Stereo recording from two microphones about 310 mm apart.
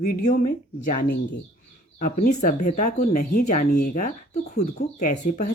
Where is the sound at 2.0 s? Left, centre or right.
Left.